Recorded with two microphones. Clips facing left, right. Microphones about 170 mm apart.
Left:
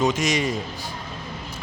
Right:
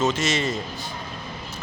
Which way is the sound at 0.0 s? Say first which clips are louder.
Left 1 dB; 15° left (ahead or behind).